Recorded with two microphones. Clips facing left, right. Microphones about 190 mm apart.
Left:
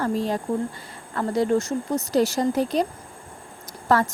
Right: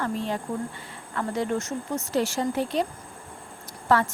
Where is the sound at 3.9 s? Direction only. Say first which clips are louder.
Left 2 dB; 40° left (ahead or behind).